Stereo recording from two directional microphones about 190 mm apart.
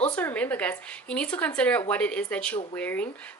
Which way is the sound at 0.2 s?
10° left (ahead or behind).